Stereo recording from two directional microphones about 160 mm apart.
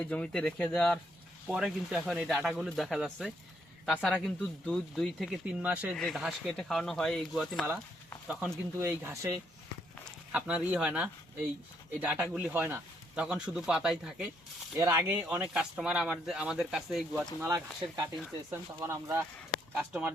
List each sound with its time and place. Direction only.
0.0 s speech: 5° left (ahead or behind); by 6.0 s 10° right (ahead or behind)
6.0 s a man's voice: centre (ahead or behind)
14.8 s speech: 15° right (ahead or behind); by 17.2 s centre (ahead or behind)
17.4 s speech: 20° right (ahead or behind)
19.5 s a sound: 5° right (ahead or behind)